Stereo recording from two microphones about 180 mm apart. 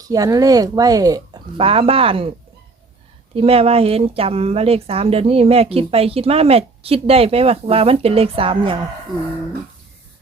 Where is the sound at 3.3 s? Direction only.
35° right (ahead or behind).